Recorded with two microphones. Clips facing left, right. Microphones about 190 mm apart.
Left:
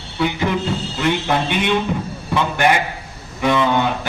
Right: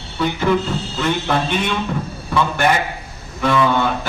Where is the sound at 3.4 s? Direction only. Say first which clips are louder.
Even; 15° left (ahead or behind).